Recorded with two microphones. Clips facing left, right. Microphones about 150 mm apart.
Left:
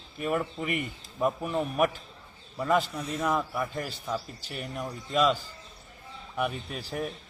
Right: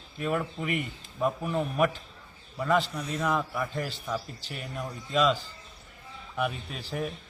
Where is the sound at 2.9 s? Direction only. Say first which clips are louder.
Even; centre (ahead or behind).